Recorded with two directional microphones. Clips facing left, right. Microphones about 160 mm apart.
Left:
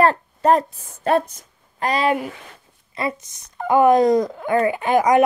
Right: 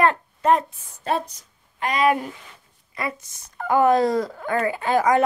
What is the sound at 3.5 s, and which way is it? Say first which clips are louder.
Speech: left 3 dB; 20° left (ahead or behind).